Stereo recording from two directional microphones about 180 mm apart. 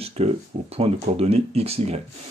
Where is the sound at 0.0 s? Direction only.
35° right (ahead or behind).